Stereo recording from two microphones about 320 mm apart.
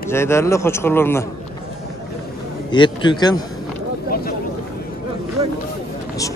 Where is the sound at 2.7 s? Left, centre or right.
Centre.